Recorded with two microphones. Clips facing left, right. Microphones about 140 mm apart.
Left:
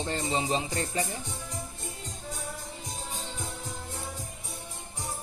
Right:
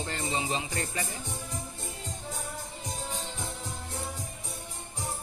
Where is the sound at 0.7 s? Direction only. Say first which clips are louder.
Left 3 dB; 25° left (ahead or behind).